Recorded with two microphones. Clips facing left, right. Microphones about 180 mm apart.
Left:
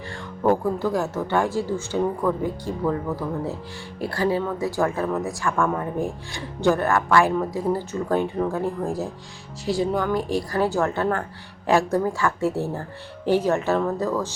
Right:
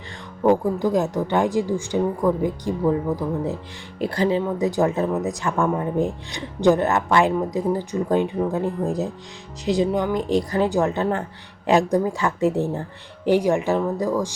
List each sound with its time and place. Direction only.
0.1 s speech: 15° right (ahead or behind)